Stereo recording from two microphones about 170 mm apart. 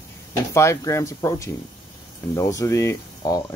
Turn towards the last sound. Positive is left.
turn(degrees=20)  # may be behind; listen again after turning